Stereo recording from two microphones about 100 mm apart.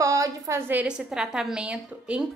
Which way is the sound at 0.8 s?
5° right (ahead or behind).